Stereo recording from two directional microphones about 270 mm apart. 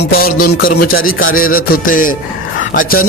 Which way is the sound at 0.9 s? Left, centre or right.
Left.